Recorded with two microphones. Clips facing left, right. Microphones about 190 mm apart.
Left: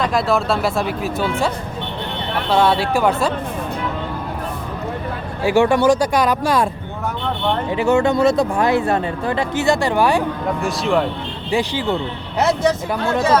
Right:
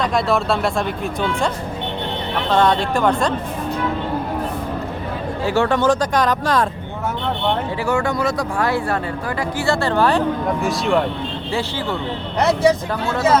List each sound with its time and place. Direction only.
0.0 s speech: centre (ahead or behind)
2.5 s speech: 5° left (ahead or behind)
5.4 s speech: 10° left (ahead or behind)
7.8 s speech: 25° left (ahead or behind)
10.6 s speech: centre (ahead or behind)
12.6 s speech: 10° right (ahead or behind)